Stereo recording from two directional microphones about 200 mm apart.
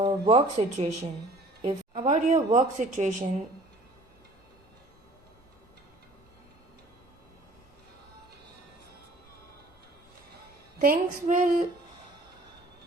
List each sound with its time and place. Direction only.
0.0 s speech: 25° right (ahead or behind)
10.8 s speech: 45° right (ahead or behind)